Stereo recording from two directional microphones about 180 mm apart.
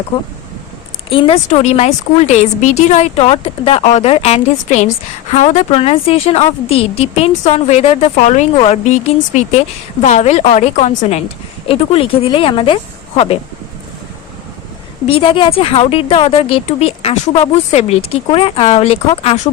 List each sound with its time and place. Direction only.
1.1 s speech: 30° left (ahead or behind)
15.0 s speech: 30° left (ahead or behind)